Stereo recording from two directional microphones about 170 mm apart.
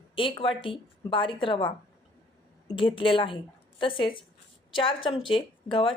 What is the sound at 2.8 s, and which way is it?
Speech, 30° left (ahead or behind).